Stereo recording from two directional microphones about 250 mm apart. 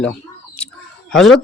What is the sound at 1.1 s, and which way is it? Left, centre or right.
Speech, centre.